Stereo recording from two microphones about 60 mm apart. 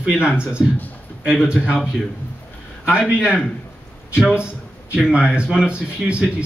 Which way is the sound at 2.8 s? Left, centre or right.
Centre.